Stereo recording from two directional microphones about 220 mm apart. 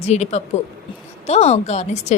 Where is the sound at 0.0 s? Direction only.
30° left (ahead or behind).